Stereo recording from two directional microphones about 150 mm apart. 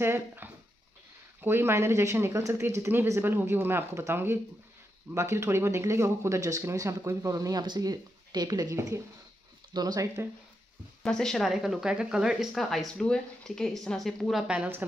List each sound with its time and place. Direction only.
0.0 s speech: 15° right (ahead or behind)
11.0 s speech: 5° left (ahead or behind)